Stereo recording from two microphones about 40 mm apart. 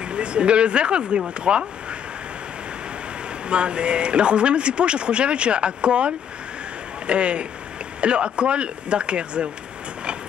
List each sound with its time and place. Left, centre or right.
0.1 s speech: right
3.4 s speech: right